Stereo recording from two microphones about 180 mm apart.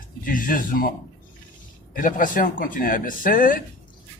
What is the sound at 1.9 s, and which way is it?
Speech, 50° left (ahead or behind).